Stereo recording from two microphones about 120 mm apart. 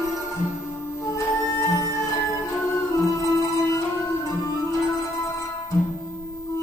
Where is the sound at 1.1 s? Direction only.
30° left (ahead or behind).